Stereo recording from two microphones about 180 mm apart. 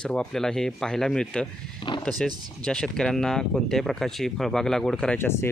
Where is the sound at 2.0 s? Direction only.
Centre (ahead or behind).